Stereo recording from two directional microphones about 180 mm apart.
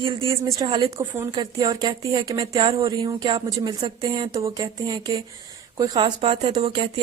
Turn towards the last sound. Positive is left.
turn(degrees=-30)  # may be behind; listen again after turning